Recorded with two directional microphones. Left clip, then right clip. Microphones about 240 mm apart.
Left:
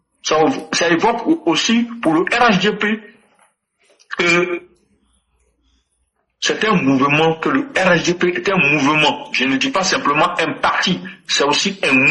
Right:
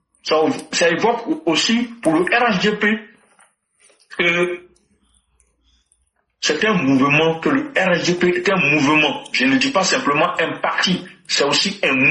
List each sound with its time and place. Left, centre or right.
0.3 s speech: left
6.4 s speech: left